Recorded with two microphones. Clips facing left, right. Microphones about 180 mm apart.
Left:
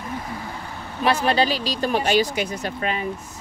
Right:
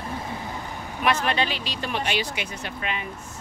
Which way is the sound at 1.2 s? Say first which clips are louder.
Left 5 dB; 35° left (ahead or behind).